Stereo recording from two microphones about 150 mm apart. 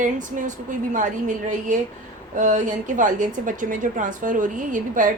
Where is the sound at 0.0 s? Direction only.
55° right (ahead or behind).